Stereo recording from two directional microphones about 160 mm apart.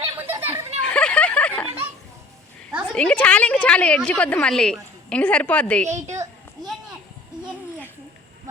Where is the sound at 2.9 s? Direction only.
5° left (ahead or behind).